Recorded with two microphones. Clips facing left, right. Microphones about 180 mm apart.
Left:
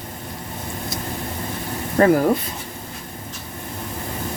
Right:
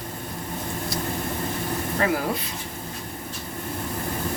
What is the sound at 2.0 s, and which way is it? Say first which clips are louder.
Speech: left 10 dB; 45° left (ahead or behind).